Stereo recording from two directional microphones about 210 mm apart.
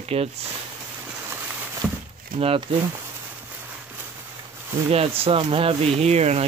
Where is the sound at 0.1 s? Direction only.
30° right (ahead or behind).